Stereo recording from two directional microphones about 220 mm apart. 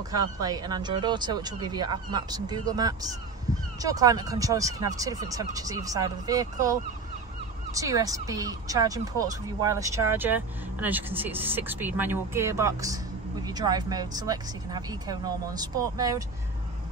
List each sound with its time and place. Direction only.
0.1 s speech: 15° right (ahead or behind)
3.5 s a sound: 15° right (ahead or behind)
3.8 s speech: 15° right (ahead or behind)